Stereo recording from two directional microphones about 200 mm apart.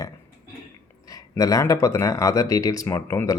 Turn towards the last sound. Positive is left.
turn(degrees=15)  # may be behind; listen again after turning